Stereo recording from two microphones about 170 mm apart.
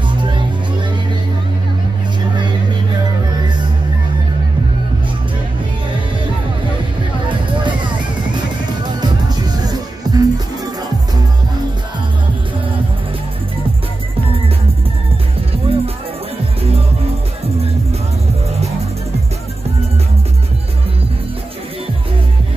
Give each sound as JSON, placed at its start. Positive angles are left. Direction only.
{"t": 8.8, "sound": "music", "side_deg": -25}
{"t": 15.7, "sound": "music", "side_deg": -35}